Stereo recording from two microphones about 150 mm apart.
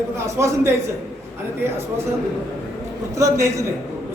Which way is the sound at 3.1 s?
20° right (ahead or behind).